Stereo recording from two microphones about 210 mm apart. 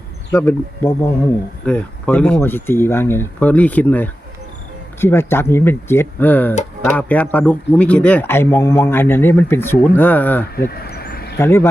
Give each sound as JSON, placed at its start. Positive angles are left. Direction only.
{"t": 0.3, "sound": "speech", "side_deg": 10}
{"t": 10.7, "sound": "a sound", "side_deg": 45}
{"t": 11.3, "sound": "speech", "side_deg": 10}